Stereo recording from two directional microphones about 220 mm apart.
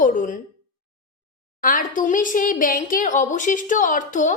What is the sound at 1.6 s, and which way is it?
A woman's voice, 35° left (ahead or behind).